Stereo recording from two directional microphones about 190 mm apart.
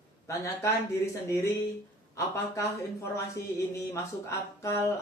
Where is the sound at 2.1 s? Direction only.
15° left (ahead or behind).